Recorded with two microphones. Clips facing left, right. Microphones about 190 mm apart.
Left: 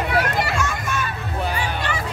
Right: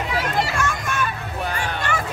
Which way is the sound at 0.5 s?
55° right (ahead or behind).